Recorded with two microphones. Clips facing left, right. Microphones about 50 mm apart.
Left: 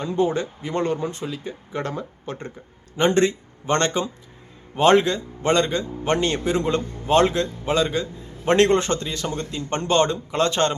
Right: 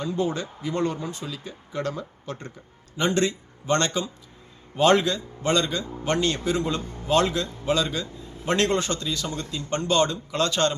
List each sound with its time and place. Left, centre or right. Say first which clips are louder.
0.1 s a man's voice: left 8 dB; left